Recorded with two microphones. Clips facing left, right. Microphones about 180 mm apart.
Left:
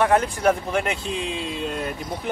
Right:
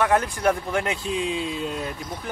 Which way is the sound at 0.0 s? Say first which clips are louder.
Left 2 dB; 20° left (ahead or behind).